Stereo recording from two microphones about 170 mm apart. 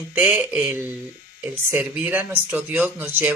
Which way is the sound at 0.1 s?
10° right (ahead or behind).